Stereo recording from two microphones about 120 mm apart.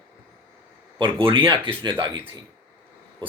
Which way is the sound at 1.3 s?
45° right (ahead or behind).